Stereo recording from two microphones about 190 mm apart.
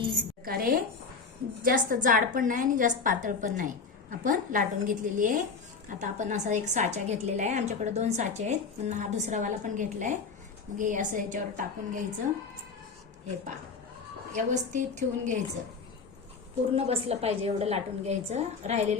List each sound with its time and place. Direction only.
0.4 s a sound: 50° right (ahead or behind)
1.6 s a woman's voice: 45° right (ahead or behind)
14.3 s a woman's voice: 40° right (ahead or behind)
16.7 s a woman's voice: 35° right (ahead or behind)